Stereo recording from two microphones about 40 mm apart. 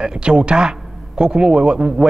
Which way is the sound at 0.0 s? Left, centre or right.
Right.